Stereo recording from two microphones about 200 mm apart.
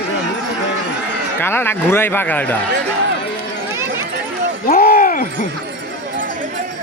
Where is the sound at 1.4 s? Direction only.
10° left (ahead or behind).